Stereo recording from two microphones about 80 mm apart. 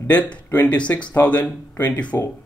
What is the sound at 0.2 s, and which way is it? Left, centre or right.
Speech, centre.